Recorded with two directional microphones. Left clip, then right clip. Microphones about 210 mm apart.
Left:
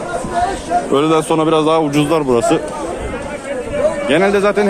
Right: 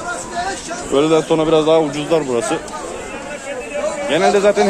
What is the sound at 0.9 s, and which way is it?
A man's voice, 30° left (ahead or behind).